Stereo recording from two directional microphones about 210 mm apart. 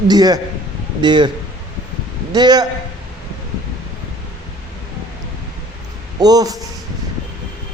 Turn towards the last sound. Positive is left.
turn(degrees=-20)  # may be behind; listen again after turning